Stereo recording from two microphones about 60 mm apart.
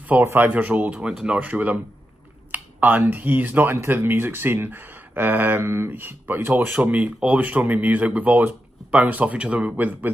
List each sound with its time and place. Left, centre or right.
0.2 s speech: right; by 1.5 s centre
1.5 s speech: right
3.7 s speech: right
6.9 s speech: right